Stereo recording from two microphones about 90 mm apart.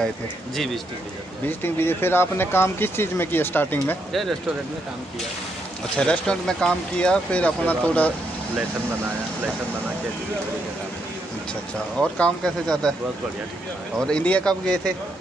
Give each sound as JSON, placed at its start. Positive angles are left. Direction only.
{"t": 1.5, "sound": "speech", "side_deg": 25}
{"t": 4.1, "sound": "speech", "side_deg": 0}
{"t": 5.9, "sound": "speech", "side_deg": 10}
{"t": 12.0, "sound": "speech", "side_deg": 10}
{"t": 14.0, "sound": "speech", "side_deg": 15}